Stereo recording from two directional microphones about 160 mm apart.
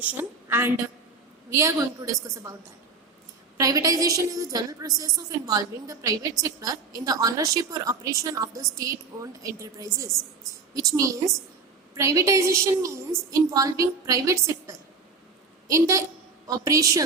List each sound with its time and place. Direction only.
0.0 s a woman's voice: 15° right (ahead or behind)
3.6 s a woman's voice: 20° right (ahead or behind)